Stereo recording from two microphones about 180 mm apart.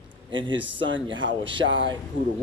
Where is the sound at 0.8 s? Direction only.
90° right.